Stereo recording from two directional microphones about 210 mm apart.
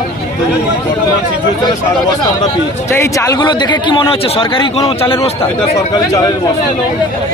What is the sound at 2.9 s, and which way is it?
Speech, 10° left (ahead or behind).